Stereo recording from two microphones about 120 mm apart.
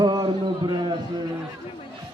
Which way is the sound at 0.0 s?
35° right (ahead or behind).